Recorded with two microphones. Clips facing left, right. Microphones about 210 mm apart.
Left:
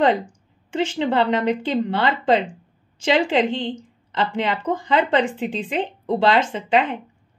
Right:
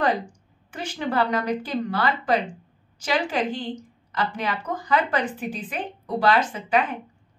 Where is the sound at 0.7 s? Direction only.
25° left (ahead or behind).